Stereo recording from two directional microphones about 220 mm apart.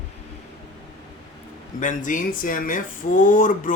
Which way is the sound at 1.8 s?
35° left (ahead or behind).